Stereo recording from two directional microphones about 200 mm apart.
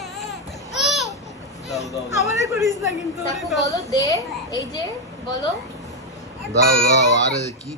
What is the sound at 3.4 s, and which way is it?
Speech, centre (ahead or behind).